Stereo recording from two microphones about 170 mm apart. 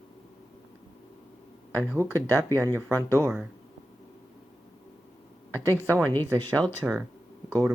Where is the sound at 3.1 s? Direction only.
15° right (ahead or behind).